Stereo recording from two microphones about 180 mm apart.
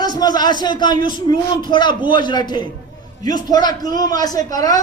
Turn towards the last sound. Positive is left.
turn(degrees=20)  # may be behind; listen again after turning